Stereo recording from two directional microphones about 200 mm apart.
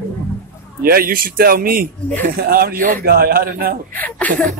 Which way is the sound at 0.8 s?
50° right (ahead or behind).